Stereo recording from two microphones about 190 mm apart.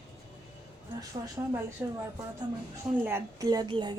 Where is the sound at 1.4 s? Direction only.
15° right (ahead or behind).